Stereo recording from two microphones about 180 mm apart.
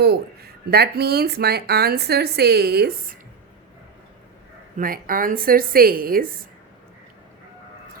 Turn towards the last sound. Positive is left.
turn(degrees=-55)  # may be behind; listen again after turning